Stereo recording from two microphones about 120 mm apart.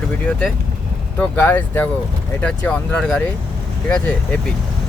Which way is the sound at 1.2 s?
15° left (ahead or behind).